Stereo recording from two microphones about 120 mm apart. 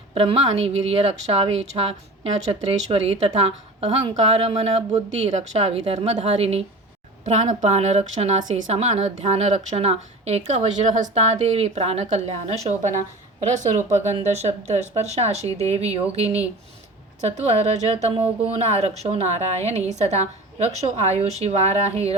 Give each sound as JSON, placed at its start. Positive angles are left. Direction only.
{"t": 0.1, "sound": "a woman's voice", "side_deg": -50}
{"t": 7.3, "sound": "a woman's voice", "side_deg": -75}
{"t": 13.4, "sound": "a woman's voice", "side_deg": -90}